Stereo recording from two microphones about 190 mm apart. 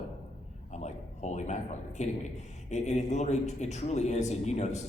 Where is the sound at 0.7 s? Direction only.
35° left (ahead or behind).